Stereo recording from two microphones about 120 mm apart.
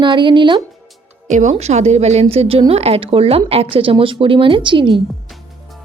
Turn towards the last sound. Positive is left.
turn(degrees=-40)  # may be behind; listen again after turning